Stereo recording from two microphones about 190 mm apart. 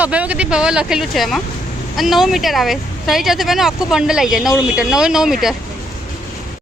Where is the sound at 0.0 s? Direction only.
5° right (ahead or behind).